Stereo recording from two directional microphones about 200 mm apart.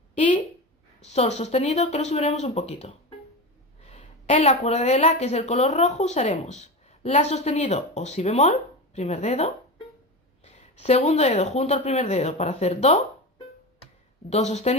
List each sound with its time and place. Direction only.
1.0 s speech: 35° left (ahead or behind)
14.3 s speech: 35° left (ahead or behind)